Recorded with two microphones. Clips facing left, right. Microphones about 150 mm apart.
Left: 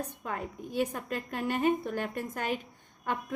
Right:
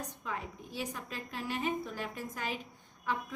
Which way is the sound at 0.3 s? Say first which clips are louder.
Left 2 dB; 55° left (ahead or behind).